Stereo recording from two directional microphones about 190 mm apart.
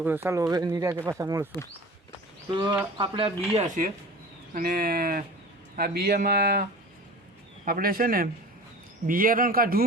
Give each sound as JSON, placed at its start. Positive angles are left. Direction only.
{"t": 0.0, "sound": "speech", "side_deg": -10}
{"t": 2.5, "sound": "speech", "side_deg": -20}
{"t": 4.5, "sound": "speech", "side_deg": -50}